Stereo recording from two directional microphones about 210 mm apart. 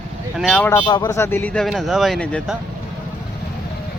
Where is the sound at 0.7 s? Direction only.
10° left (ahead or behind).